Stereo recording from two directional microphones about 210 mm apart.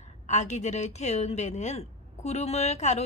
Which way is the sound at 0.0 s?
35° left (ahead or behind).